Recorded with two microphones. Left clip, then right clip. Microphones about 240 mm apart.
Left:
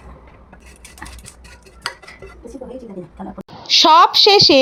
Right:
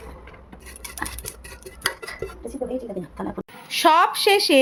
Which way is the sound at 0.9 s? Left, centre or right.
Right.